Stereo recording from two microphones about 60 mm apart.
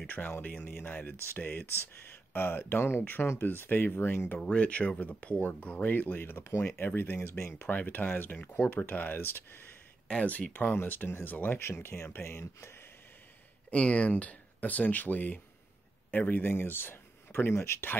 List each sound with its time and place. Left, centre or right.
0.0 s speech: left
4.4 s speech: centre; by 7.2 s left
7.3 s speech: left
7.6 s speech: left
10.0 s speech: left
11.6 s speech: left
13.7 s speech: left